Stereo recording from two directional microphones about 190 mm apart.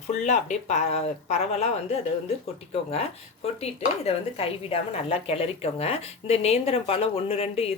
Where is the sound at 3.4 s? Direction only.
35° left (ahead or behind).